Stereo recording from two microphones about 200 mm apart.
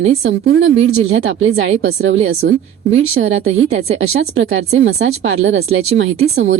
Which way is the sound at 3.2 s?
55° right (ahead or behind).